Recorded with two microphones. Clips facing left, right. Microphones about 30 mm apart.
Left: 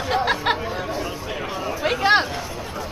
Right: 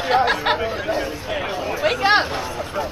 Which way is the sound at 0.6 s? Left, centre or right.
Right.